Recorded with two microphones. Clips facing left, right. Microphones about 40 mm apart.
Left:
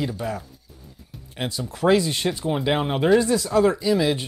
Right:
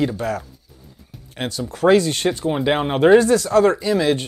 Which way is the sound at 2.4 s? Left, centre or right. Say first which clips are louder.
Right 2 dB; centre.